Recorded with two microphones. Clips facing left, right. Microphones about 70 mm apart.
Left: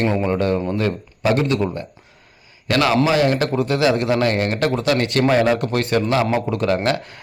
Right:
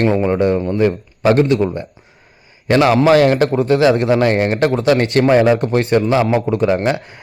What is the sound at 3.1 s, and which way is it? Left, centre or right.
Speech, right.